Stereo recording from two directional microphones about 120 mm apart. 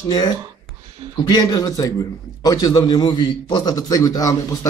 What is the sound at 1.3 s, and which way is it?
Speech, 35° left (ahead or behind).